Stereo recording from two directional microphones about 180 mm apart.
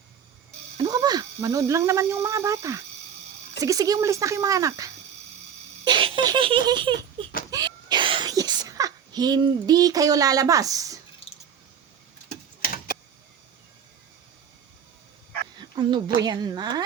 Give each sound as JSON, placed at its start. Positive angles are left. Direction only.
{"t": 0.8, "sound": "speech", "side_deg": -20}
{"t": 5.8, "sound": "baby laughter", "side_deg": -25}
{"t": 7.5, "sound": "a sound", "side_deg": -25}
{"t": 12.6, "sound": "tick-tock", "side_deg": 55}
{"t": 15.7, "sound": "speech", "side_deg": -25}